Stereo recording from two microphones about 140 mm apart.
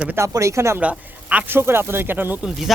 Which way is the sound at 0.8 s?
10° right (ahead or behind).